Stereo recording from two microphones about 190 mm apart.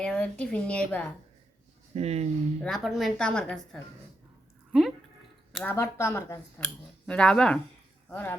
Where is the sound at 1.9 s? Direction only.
35° right (ahead or behind).